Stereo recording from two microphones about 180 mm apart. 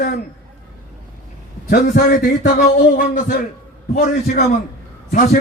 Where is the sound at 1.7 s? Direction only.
50° left (ahead or behind).